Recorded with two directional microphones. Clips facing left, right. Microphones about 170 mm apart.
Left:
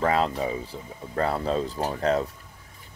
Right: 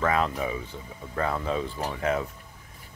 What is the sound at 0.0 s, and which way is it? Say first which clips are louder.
Speech: left 2 dB; 30° left (ahead or behind).